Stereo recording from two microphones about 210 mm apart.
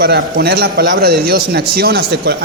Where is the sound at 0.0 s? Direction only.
50° right (ahead or behind).